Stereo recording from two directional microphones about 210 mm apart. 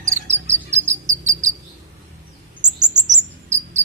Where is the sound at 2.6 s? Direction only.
35° right (ahead or behind).